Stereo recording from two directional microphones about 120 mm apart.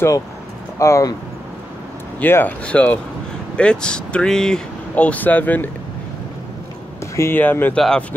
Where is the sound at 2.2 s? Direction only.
15° left (ahead or behind).